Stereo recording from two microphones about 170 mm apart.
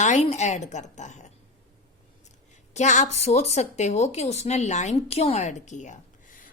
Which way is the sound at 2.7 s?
45° left (ahead or behind).